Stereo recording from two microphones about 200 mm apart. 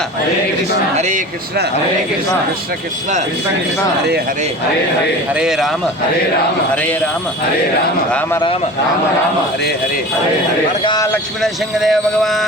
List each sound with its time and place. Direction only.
0.9 s a sound: 35° right (ahead or behind)
5.3 s speech: 5° right (ahead or behind)
10.8 s speech: 15° left (ahead or behind)
11.4 s speech: centre (ahead or behind)